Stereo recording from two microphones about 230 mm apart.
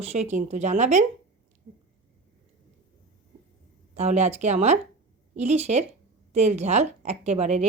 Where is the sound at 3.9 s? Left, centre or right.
Right.